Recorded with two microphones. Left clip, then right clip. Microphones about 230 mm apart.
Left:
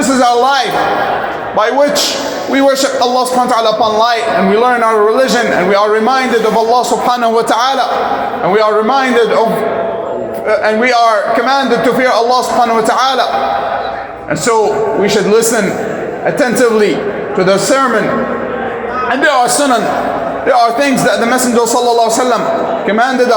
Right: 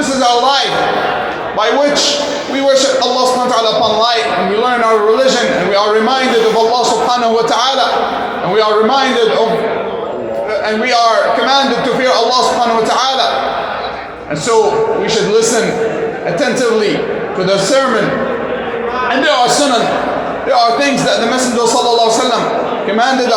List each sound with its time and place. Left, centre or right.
2.6 s speech: left
4.6 s speech: left
7.1 s a man's voice: left
11.4 s a man's voice: left
20.5 s a man's voice: left